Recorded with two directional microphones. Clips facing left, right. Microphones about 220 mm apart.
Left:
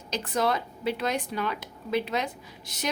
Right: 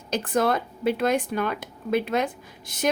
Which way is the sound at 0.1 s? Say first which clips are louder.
Right 4 dB; 50° right (ahead or behind).